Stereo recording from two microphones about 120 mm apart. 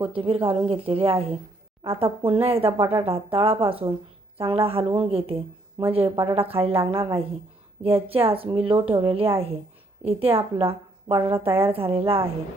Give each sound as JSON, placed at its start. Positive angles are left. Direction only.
{"t": 0.0, "sound": "a woman's voice", "side_deg": -50}